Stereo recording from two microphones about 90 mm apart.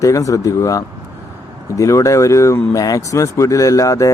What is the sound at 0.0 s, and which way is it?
Speech, 40° left (ahead or behind).